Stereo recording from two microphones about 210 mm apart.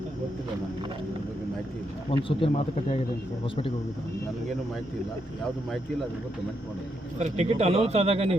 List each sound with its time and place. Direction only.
2.2 s speech: 25° left (ahead or behind)
7.2 s speech: 30° right (ahead or behind)